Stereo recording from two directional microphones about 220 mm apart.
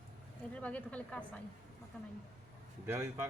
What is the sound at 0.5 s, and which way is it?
Speech, 5° left (ahead or behind).